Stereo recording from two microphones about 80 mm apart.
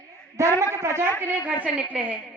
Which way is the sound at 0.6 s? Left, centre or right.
Right.